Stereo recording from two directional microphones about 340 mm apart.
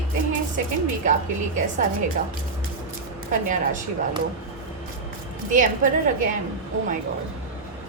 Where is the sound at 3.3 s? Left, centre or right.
Right.